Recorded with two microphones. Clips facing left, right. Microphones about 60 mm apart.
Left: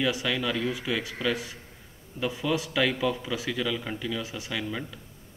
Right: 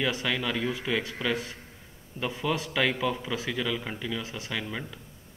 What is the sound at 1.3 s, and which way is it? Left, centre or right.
Speech, right.